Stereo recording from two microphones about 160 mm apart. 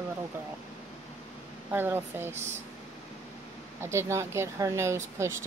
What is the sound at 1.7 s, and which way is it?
Speech, 15° right (ahead or behind).